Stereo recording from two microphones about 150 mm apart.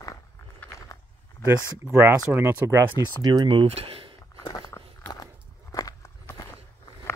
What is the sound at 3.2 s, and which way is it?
Speech, 25° right (ahead or behind).